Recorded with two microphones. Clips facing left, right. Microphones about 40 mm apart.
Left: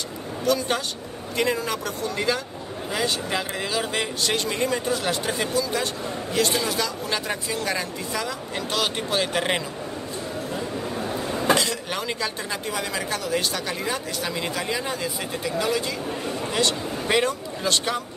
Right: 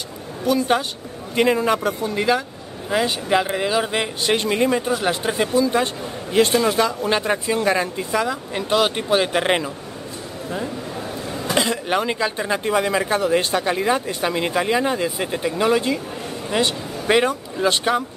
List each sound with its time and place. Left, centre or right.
0.5 s speech: centre
11.5 s speech: right
16.5 s speech: centre